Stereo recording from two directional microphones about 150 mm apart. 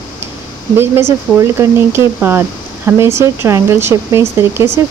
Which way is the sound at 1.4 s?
15° right (ahead or behind).